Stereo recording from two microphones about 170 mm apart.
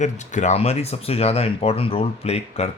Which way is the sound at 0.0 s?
45° left (ahead or behind).